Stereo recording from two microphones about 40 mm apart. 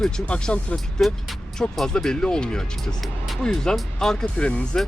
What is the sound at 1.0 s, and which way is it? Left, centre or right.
Speech, left.